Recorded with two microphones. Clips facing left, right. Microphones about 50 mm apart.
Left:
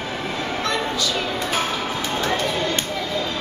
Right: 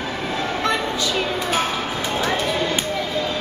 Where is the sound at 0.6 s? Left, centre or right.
Centre.